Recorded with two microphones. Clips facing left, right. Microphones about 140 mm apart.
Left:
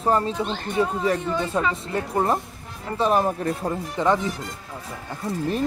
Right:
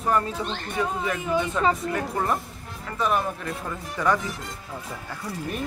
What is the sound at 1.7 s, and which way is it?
Speech, 25° left (ahead or behind).